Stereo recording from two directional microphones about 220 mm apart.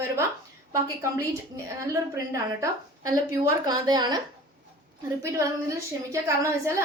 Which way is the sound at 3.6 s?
15° right (ahead or behind).